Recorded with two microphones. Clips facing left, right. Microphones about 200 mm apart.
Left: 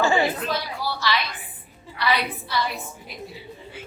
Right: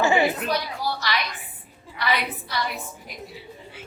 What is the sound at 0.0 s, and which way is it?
Chatter, 20° right (ahead or behind).